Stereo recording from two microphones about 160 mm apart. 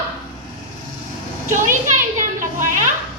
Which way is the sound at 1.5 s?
50° right (ahead or behind).